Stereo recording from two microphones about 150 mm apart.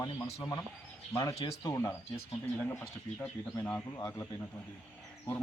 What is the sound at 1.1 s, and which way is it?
Speech, 25° left (ahead or behind).